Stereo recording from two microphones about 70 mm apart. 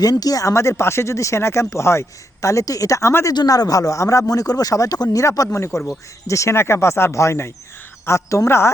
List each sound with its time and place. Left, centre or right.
0.0 s speech: left
3.3 s speech: left